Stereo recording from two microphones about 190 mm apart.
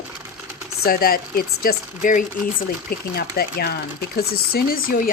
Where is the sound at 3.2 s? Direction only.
55° left (ahead or behind).